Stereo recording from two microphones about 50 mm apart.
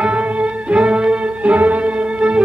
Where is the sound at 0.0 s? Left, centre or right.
Right.